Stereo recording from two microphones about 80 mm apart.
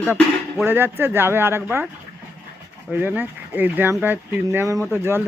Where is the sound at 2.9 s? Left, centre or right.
Right.